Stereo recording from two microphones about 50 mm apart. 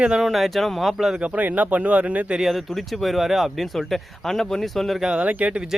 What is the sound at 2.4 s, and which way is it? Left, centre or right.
Speech, centre.